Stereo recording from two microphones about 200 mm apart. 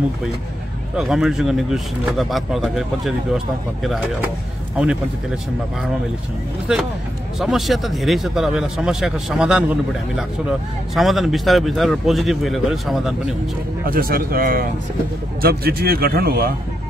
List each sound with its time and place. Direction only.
0.9 s speech: centre (ahead or behind)
7.3 s speech: centre (ahead or behind)
11.0 s speech: centre (ahead or behind)
13.8 s a man's voice: 45° right (ahead or behind)